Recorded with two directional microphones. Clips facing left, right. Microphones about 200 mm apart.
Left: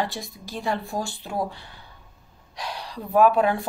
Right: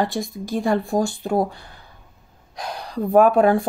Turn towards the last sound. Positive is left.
turn(degrees=-45)  # may be behind; listen again after turning